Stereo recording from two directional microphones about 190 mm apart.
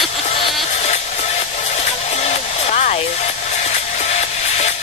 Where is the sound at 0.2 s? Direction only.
30° left (ahead or behind).